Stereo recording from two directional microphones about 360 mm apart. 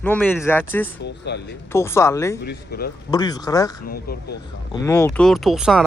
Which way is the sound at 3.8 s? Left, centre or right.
Left.